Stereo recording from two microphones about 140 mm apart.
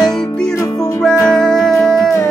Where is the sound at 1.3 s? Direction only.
5° left (ahead or behind).